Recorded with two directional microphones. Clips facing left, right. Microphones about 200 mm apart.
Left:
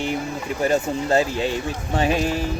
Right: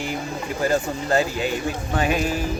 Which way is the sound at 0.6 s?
25° left (ahead or behind).